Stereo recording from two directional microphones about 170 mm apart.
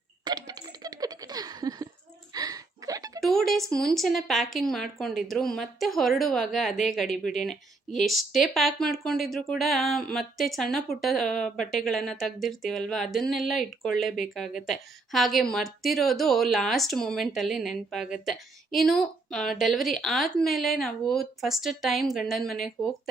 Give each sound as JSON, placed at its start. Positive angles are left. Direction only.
{"t": 0.3, "sound": "a sound", "side_deg": -25}
{"t": 3.2, "sound": "music", "side_deg": 0}
{"t": 3.7, "sound": "speech", "side_deg": 0}